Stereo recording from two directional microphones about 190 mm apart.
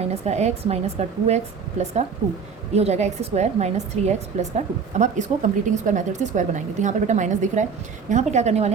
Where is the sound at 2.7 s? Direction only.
35° right (ahead or behind).